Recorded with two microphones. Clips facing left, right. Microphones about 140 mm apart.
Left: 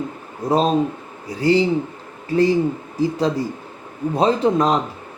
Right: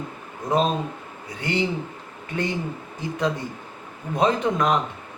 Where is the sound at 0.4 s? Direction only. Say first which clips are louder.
Left 5 dB; 35° left (ahead or behind).